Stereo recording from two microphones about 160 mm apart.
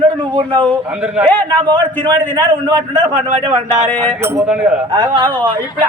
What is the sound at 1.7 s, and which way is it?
Speech, 10° left (ahead or behind).